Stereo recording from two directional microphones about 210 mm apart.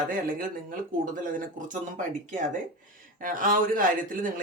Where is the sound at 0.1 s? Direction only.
40° right (ahead or behind).